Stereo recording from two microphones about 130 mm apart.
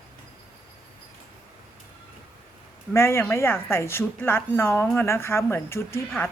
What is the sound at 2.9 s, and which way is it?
A woman's voice, 20° left (ahead or behind).